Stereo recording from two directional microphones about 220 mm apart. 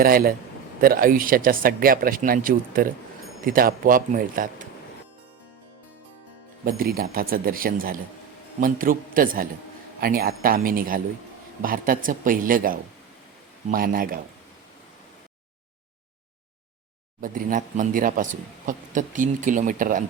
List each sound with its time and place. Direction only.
0.0 s speech: 40° right (ahead or behind)
6.7 s speech: 40° right (ahead or behind)
17.2 s speech: 40° right (ahead or behind)